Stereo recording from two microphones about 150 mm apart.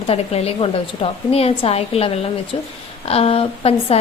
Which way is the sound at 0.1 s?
40° left (ahead or behind).